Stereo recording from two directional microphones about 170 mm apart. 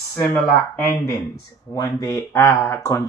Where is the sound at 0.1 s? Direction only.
10° left (ahead or behind).